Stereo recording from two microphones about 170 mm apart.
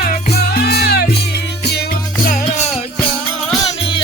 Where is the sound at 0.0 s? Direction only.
65° left (ahead or behind).